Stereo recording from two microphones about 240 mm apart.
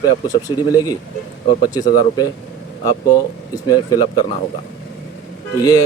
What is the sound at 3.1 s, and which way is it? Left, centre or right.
A man's voice, centre.